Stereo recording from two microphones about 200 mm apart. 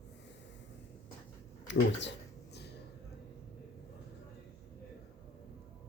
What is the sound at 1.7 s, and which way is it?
Speech, 60° left (ahead or behind).